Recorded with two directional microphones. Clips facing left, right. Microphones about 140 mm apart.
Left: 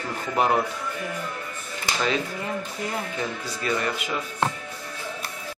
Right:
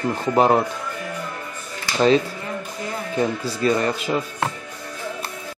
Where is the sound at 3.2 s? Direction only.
35° right (ahead or behind).